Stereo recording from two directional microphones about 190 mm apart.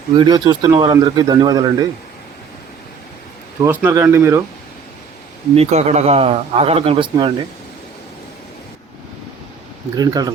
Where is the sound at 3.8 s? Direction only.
10° right (ahead or behind).